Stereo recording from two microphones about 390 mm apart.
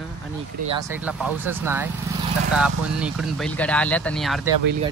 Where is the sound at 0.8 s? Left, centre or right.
Centre.